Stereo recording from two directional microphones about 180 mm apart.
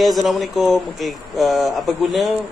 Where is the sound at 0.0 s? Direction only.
Centre (ahead or behind).